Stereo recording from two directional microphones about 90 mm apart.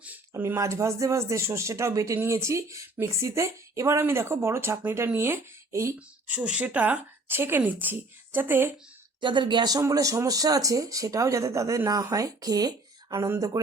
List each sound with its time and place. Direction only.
0.0 s a woman's voice: 20° right (ahead or behind)
6.2 s a woman's voice: 15° right (ahead or behind)
9.2 s speech: 60° right (ahead or behind)
9.9 s speech: 40° right (ahead or behind)